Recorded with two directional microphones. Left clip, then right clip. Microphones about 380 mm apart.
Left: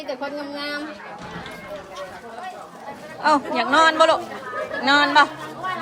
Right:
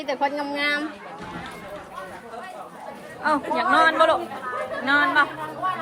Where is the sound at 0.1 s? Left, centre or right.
Right.